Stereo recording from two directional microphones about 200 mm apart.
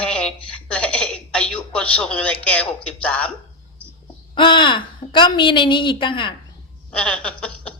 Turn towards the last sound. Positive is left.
turn(degrees=5)  # may be behind; listen again after turning